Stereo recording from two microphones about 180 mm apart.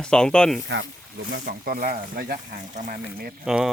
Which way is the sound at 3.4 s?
Centre (ahead or behind).